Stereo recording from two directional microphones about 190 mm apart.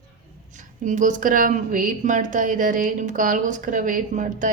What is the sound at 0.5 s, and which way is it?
A woman's voice, 40° right (ahead or behind).